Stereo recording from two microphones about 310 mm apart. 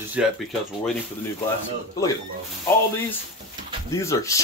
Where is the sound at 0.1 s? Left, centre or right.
Centre.